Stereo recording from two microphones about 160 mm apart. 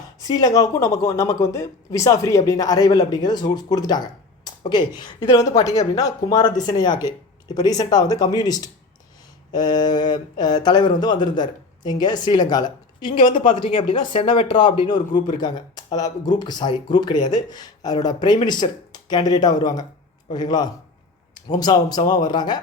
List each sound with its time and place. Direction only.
0.2 s speech: 25° left (ahead or behind)
13.1 s speech: 55° left (ahead or behind)
14.1 s speech: 35° left (ahead or behind)